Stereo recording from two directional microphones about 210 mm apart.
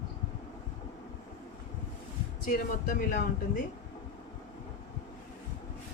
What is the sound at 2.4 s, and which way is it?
Speech, 40° left (ahead or behind).